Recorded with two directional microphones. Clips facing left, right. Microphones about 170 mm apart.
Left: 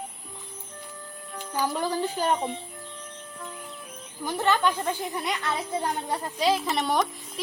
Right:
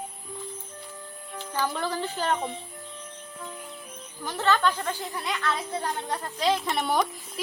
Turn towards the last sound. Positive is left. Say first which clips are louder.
# even
turn(degrees=0)  # may be behind; listen again after turning